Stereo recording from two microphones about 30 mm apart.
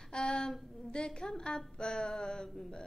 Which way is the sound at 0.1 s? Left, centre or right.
Left.